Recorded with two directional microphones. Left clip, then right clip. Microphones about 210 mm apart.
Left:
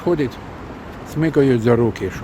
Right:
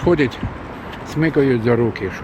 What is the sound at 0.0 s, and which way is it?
Speech, 5° right (ahead or behind).